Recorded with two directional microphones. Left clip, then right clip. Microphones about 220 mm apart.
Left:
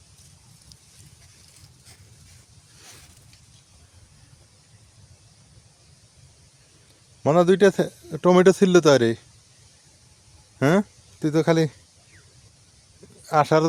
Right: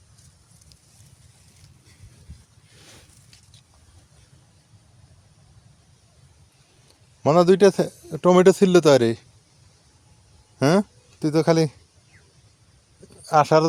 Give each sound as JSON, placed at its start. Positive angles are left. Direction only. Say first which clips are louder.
{"t": 7.2, "sound": "a man's voice", "louder": "right 2 dB", "side_deg": -10}
{"t": 10.6, "sound": "a sound", "louder": "right 1 dB", "side_deg": -5}
{"t": 13.2, "sound": "speech", "louder": "right 2 dB", "side_deg": -5}